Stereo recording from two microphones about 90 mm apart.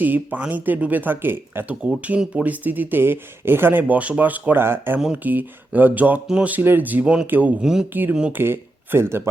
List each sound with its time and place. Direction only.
0.0 s speech: 20° right (ahead or behind)
7.6 s speech: 5° right (ahead or behind)
8.3 s speech: 25° right (ahead or behind)